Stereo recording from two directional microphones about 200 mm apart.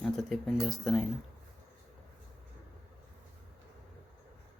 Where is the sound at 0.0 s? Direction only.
Centre (ahead or behind).